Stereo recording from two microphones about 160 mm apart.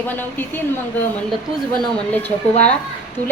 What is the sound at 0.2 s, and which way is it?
Speech, 10° left (ahead or behind).